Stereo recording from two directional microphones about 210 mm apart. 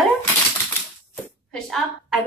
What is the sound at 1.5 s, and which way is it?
Speech, centre (ahead or behind).